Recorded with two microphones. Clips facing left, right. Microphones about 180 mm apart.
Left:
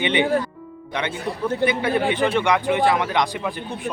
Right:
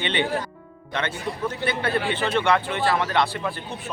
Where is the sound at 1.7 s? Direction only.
15° left (ahead or behind).